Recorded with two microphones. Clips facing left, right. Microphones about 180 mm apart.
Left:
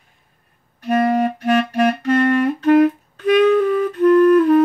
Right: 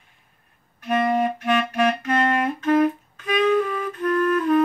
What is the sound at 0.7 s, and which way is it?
Clarinet, 35° left (ahead or behind).